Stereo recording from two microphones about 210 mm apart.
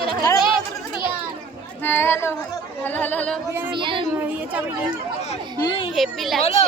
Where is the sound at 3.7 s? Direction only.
25° right (ahead or behind).